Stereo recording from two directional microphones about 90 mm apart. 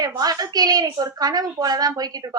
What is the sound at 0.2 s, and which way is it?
A woman's voice, 45° right (ahead or behind).